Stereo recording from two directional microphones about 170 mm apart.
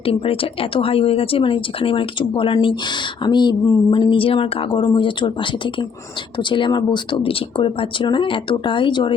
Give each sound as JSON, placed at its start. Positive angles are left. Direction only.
{"t": 0.0, "sound": "speech", "side_deg": 35}